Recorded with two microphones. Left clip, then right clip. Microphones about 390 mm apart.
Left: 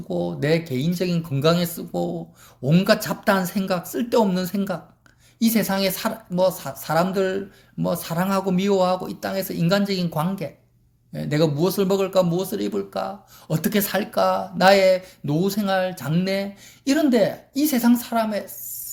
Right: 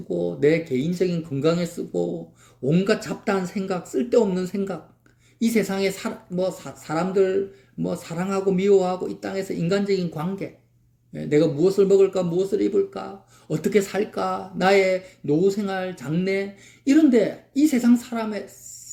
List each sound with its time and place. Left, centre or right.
0.1 s a man's voice: left